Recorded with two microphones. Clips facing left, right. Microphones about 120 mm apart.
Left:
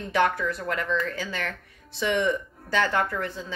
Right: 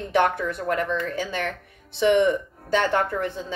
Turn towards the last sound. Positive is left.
turn(degrees=-25)  # may be behind; listen again after turning